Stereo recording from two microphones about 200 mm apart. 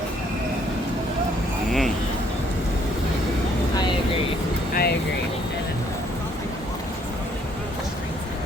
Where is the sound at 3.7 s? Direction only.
20° left (ahead or behind).